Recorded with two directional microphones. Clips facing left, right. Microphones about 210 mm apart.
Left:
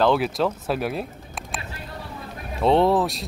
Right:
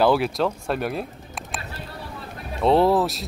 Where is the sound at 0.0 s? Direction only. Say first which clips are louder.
Right 1 dB; centre (ahead or behind).